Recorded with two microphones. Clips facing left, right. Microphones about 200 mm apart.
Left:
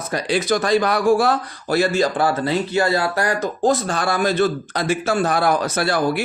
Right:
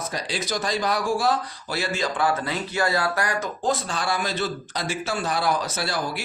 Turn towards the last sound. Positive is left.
turn(degrees=55)  # may be behind; listen again after turning